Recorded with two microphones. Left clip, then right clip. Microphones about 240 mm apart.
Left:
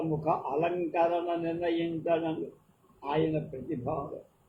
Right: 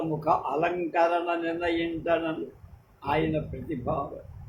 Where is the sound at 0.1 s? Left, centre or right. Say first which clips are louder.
Right 5 dB; right.